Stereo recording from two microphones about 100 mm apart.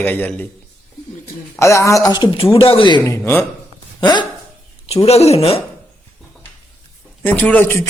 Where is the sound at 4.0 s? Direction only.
45° left (ahead or behind).